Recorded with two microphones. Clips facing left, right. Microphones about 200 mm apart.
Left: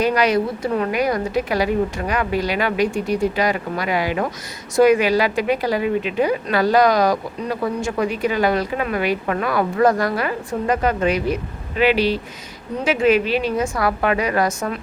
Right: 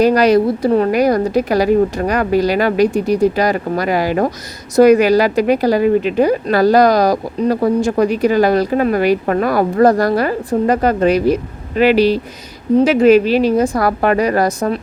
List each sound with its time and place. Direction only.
0.0 s a woman's voice: 40° right (ahead or behind)